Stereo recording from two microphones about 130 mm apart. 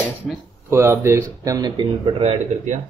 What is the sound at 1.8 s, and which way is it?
Speech, 40° right (ahead or behind).